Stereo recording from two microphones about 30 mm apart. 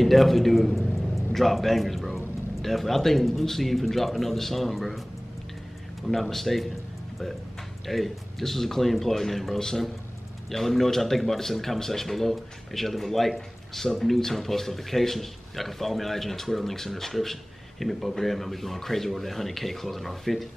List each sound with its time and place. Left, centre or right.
0.0 s a man's voice: centre
6.2 s a man's voice: centre
7.8 s speech: centre
9.6 s speech: centre
10.5 s speech: centre